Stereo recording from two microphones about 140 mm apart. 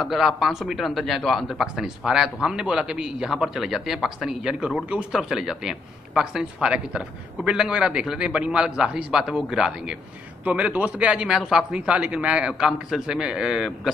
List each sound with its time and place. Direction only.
0.0 s a man's voice: centre (ahead or behind)